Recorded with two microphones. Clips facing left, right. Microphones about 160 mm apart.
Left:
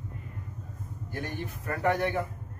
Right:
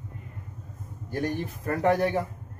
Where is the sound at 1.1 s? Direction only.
40° right (ahead or behind).